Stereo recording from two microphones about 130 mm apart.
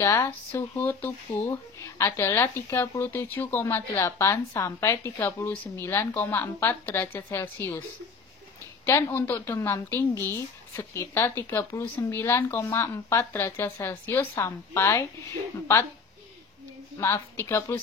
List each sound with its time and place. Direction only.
0.0 s speech: 20° left (ahead or behind)
8.8 s a woman's voice: 15° left (ahead or behind)
17.0 s a woman's voice: 20° left (ahead or behind)